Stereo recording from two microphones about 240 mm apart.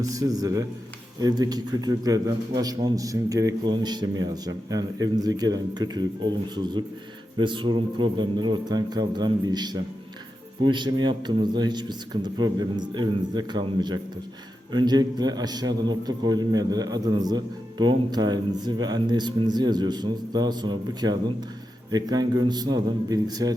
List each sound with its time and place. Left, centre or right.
0.0 s a man's voice: centre